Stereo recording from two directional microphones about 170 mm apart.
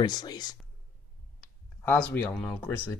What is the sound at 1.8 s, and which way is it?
Speech, 10° left (ahead or behind).